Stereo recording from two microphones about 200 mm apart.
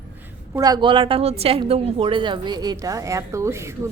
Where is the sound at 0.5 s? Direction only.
20° right (ahead or behind).